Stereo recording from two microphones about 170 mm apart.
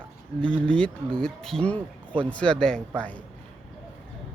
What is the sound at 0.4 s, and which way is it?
Speech, 5° left (ahead or behind).